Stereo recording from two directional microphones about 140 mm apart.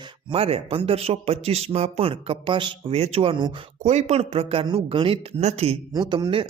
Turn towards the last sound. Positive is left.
turn(degrees=-35)  # may be behind; listen again after turning